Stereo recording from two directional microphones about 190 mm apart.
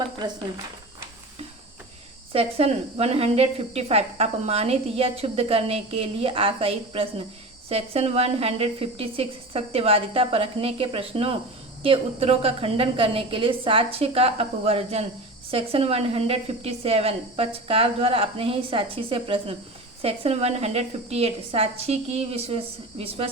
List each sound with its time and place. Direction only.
0.2 s a woman's voice: 20° right (ahead or behind)
2.3 s a woman's voice: 30° right (ahead or behind)